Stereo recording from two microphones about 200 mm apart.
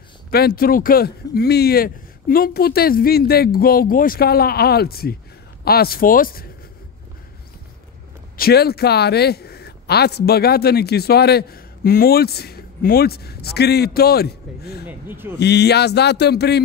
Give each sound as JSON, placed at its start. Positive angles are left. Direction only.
{"t": 0.3, "sound": "speech", "side_deg": 50}
{"t": 8.4, "sound": "speech", "side_deg": 50}
{"t": 14.9, "sound": "speech", "side_deg": -10}
{"t": 15.3, "sound": "a man's voice", "side_deg": 55}